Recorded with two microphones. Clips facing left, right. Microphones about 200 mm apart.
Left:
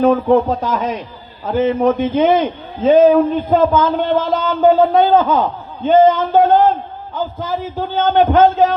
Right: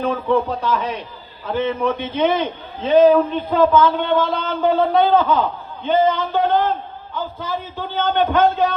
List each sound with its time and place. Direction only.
0.0 s a man's voice: 50° left (ahead or behind)